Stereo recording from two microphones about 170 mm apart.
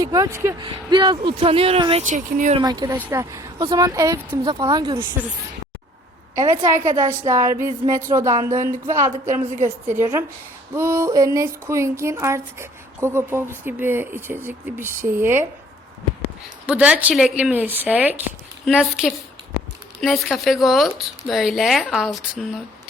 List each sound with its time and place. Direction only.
0.0 s speech: 20° right (ahead or behind)
2.0 s a woman's voice: 45° right (ahead or behind)
2.6 s speech: 25° right (ahead or behind)
6.3 s speech: 20° right (ahead or behind)
9.3 s a woman's voice: 45° right (ahead or behind)
10.0 s speech: 10° right (ahead or behind)
16.6 s speech: 10° right (ahead or behind)